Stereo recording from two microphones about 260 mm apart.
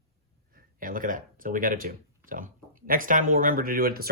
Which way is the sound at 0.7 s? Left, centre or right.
Right.